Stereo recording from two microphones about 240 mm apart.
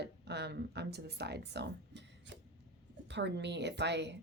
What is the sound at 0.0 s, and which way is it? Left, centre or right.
Speech, right.